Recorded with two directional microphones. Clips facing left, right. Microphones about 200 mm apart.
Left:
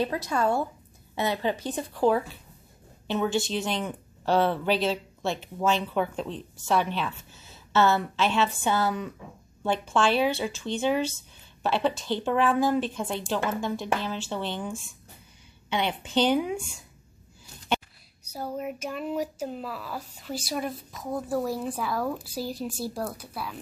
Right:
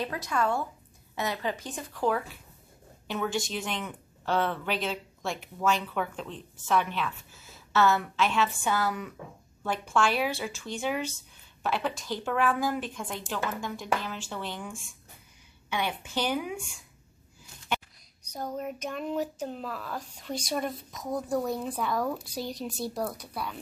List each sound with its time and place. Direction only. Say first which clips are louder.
0.0 s speech: left 3 dB; 30° left (ahead or behind)
18.2 s speech: left 2 dB; 5° left (ahead or behind)